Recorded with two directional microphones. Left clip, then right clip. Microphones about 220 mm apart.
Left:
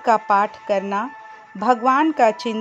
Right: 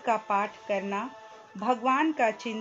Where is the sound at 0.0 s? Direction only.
40° left (ahead or behind).